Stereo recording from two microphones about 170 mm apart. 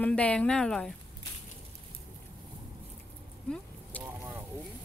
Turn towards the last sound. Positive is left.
turn(degrees=-10)  # may be behind; listen again after turning